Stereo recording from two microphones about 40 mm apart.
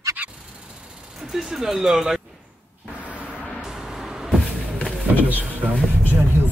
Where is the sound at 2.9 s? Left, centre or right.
Right.